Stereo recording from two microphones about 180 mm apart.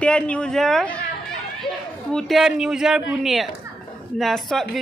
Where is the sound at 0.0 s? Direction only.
5° left (ahead or behind).